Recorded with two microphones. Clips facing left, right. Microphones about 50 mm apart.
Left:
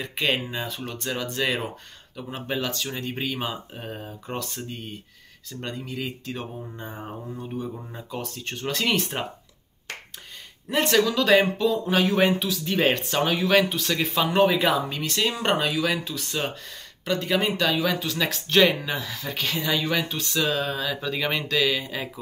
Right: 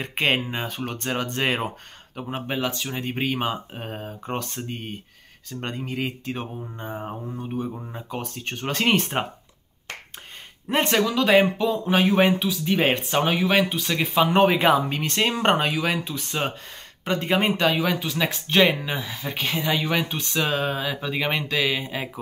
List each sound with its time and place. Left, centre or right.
0.0 s speech: right
8.1 s speech: right
10.7 s speech: right